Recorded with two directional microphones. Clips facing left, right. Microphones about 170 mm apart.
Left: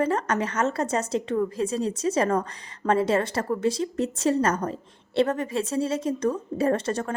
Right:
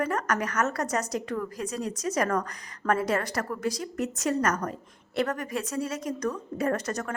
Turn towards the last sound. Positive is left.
turn(degrees=30)  # may be behind; listen again after turning